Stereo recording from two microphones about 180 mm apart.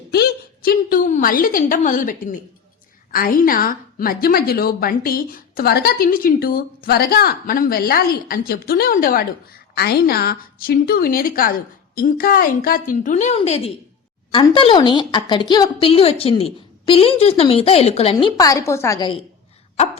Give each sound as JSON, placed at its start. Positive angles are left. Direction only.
{"t": 0.1, "sound": "a woman's voice", "side_deg": 60}